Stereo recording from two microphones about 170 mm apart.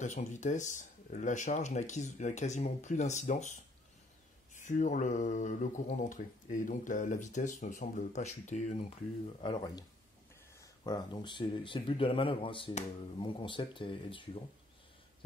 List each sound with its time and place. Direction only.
0.0 s speech: 45° left (ahead or behind)
4.6 s speech: 50° left (ahead or behind)
9.4 s speech: 25° left (ahead or behind)